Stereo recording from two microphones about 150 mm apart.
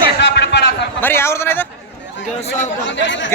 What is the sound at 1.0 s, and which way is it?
Speech, 15° left (ahead or behind).